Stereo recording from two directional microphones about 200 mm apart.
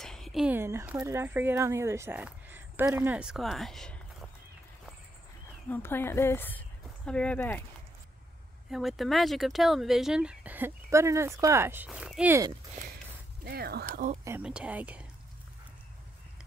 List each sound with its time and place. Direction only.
0.0 s speech: centre (ahead or behind)
5.7 s a woman's voice: 10° left (ahead or behind)
8.6 s speech: centre (ahead or behind)
13.4 s speech: 50° right (ahead or behind)
14.2 s speech: 10° right (ahead or behind)